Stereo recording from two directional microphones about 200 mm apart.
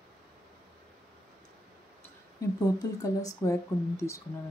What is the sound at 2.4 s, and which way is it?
Speech, 15° left (ahead or behind).